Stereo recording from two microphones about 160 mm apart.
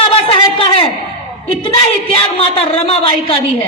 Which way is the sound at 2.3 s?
40° left (ahead or behind).